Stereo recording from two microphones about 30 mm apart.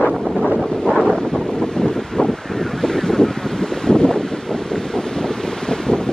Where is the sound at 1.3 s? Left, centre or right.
Left.